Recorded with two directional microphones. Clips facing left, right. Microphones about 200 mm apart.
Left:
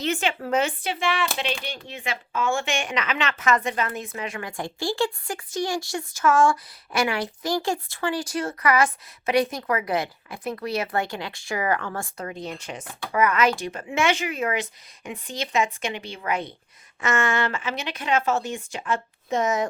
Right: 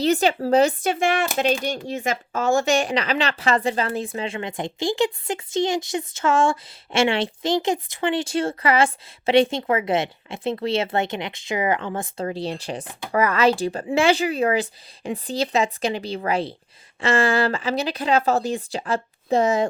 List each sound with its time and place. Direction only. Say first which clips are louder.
0.0 s speech: right 7 dB; 35° right (ahead or behind)